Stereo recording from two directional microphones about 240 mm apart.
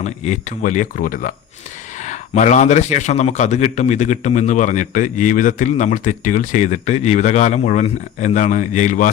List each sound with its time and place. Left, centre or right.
0.0 s a man's voice: left